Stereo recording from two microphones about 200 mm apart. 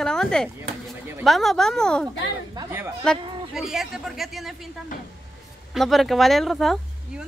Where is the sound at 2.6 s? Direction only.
10° right (ahead or behind).